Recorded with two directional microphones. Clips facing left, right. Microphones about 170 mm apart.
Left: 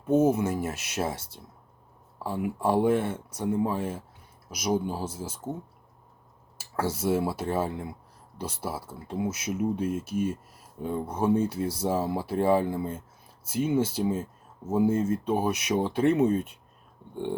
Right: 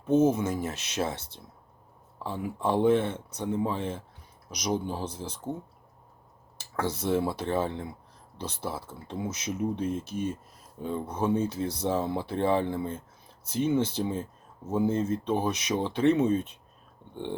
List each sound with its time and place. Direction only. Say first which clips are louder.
0.1 s speech: left 1 dB; 10° left (ahead or behind)
6.6 s speech: left 2 dB; 10° left (ahead or behind)